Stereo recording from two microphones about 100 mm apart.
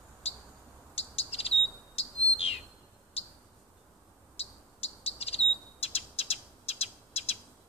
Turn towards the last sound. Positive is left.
turn(degrees=90)